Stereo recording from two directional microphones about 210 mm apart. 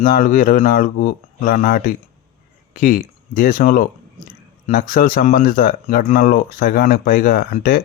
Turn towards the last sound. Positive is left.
turn(degrees=40)  # may be behind; listen again after turning